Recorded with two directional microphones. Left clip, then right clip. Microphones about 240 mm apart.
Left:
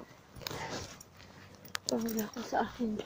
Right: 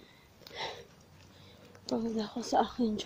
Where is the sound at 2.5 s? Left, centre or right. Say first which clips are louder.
Right 4 dB; right.